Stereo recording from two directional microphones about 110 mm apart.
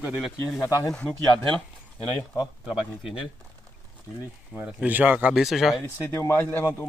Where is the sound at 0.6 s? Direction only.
30° left (ahead or behind).